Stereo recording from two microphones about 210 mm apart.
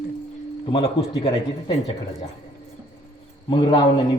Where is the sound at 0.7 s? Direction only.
25° left (ahead or behind).